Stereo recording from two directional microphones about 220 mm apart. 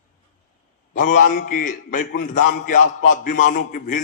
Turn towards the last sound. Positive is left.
turn(degrees=40)  # may be behind; listen again after turning